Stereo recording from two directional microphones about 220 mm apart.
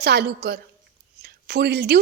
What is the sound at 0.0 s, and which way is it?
A woman's voice, 50° right (ahead or behind).